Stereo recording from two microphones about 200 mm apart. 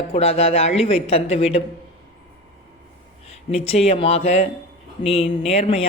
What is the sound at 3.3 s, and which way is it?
A man's voice, 30° left (ahead or behind).